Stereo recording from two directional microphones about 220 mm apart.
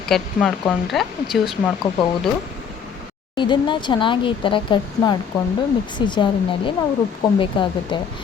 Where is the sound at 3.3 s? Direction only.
20° left (ahead or behind).